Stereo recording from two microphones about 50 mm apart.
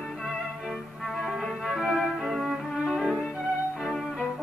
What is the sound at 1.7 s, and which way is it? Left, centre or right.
Cello, centre.